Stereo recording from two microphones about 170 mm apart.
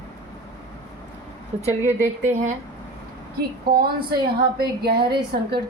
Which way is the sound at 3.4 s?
65° right (ahead or behind).